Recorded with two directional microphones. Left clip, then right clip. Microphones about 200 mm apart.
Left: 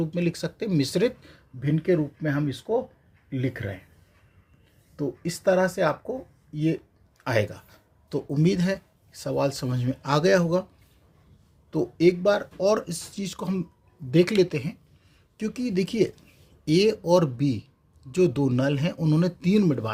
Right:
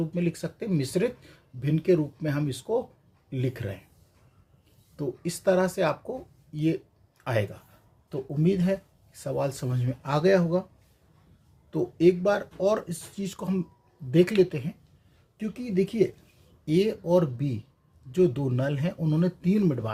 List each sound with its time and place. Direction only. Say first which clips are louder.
0.0 s speech: left 3 dB; 25° left (ahead or behind)
4.9 s speech: left 2 dB; 25° left (ahead or behind)
9.1 s speech: left 3 dB; 25° left (ahead or behind)
11.7 s speech: left 1 dB; 20° left (ahead or behind)